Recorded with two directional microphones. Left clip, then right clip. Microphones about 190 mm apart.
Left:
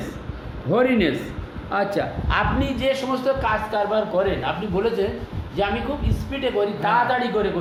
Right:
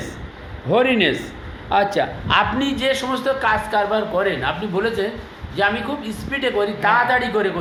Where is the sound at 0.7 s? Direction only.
15° right (ahead or behind).